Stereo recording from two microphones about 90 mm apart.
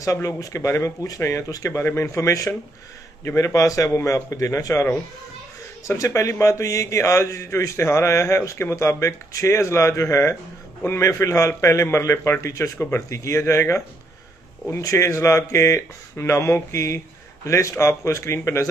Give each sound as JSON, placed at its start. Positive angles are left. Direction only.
{"t": 0.0, "sound": "speech", "side_deg": 35}
{"t": 5.9, "sound": "speech", "side_deg": 35}